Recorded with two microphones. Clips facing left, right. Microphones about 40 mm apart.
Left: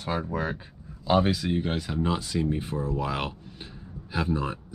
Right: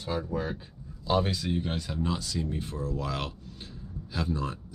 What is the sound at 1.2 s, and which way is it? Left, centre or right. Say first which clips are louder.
Speech: left 4 dB; centre.